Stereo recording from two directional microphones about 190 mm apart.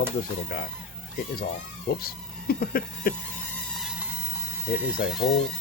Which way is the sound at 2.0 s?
50° left (ahead or behind).